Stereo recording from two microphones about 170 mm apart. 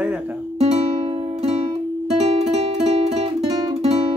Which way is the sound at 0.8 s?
35° right (ahead or behind).